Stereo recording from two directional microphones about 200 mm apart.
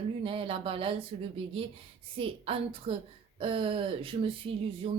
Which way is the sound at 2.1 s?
25° right (ahead or behind).